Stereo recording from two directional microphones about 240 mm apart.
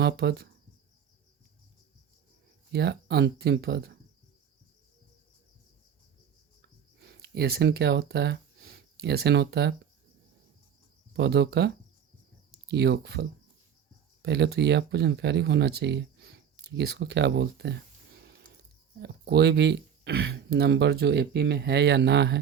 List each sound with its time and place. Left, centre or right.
0.0 s speech: right
2.7 s speech: right
7.1 s speech: right
11.1 s speech: right
18.2 s music: right
18.9 s speech: right